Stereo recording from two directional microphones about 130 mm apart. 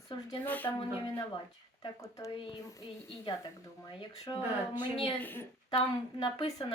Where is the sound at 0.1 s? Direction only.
40° left (ahead or behind).